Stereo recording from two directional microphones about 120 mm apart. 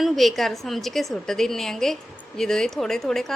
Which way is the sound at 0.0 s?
Centre (ahead or behind).